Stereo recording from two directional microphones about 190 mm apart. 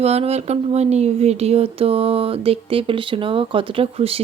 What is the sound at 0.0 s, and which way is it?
Speech, 35° right (ahead or behind).